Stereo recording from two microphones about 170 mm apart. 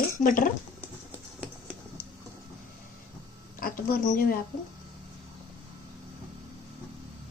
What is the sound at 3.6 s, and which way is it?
Speech, 60° left (ahead or behind).